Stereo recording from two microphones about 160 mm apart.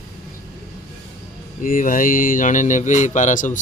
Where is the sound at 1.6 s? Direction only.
55° left (ahead or behind).